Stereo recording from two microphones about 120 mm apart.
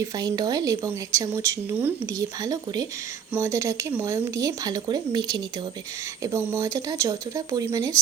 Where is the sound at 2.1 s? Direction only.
30° right (ahead or behind).